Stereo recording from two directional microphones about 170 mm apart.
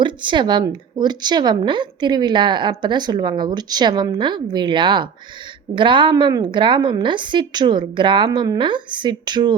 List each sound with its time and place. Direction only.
0.0 s speech: 30° right (ahead or behind)